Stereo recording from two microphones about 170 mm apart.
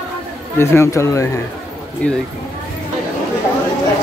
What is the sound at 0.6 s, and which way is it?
Speech, 15° left (ahead or behind).